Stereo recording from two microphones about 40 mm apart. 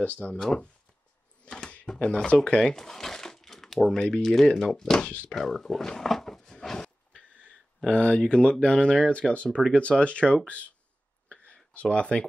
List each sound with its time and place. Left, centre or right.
0.2 s speech: centre
2.0 s speech: left
2.3 s speech: centre
5.3 s a sound: centre
7.2 s a sound: left
7.9 s speech: left
9.3 s speech: left
11.2 s a sound: left
11.7 s speech: left